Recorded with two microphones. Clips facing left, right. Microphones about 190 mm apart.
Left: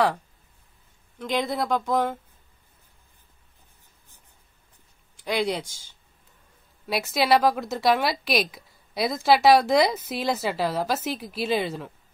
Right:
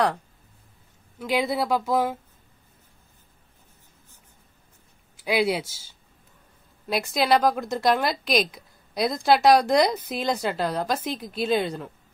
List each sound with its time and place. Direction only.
1.2 s a woman's voice: 5° right (ahead or behind)
5.1 s a woman's voice: 5° right (ahead or behind)